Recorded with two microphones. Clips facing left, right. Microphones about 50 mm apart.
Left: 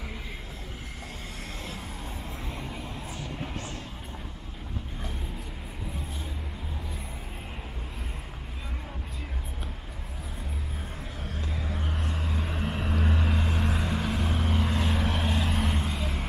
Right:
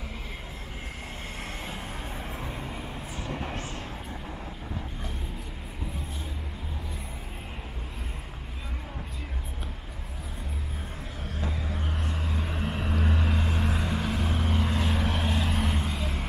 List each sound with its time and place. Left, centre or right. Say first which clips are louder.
2.5 s vehicle: right 1 dB; centre
11.2 s vehicle: right 2 dB; centre